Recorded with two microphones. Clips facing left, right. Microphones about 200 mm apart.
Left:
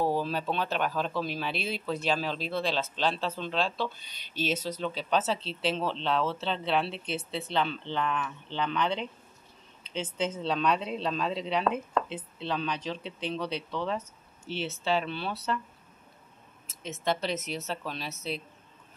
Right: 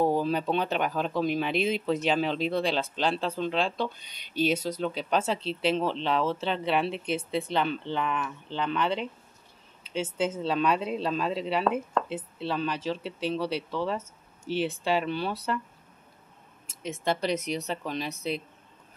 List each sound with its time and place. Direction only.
0.0 s speech: 15° right (ahead or behind)
16.6 s speech: 10° right (ahead or behind)